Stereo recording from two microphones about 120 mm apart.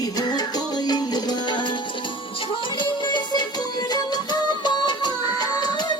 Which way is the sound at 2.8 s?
40° left (ahead or behind).